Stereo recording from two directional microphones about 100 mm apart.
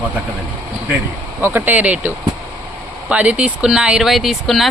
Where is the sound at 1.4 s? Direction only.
20° right (ahead or behind); by 4.7 s centre (ahead or behind).